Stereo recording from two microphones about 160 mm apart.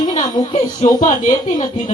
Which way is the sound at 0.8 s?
45° left (ahead or behind).